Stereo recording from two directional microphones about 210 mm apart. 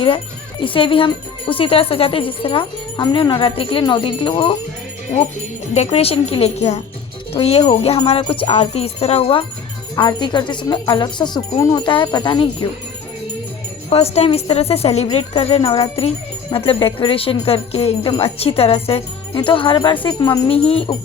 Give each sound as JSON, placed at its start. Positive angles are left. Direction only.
{"t": 0.6, "sound": "speech", "side_deg": 25}
{"t": 5.7, "sound": "speech", "side_deg": 30}
{"t": 13.9, "sound": "speech", "side_deg": 30}